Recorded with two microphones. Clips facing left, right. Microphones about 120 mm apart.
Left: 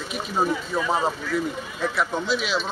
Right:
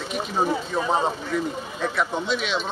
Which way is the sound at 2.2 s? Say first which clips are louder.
Left 1 dB; 5° left (ahead or behind).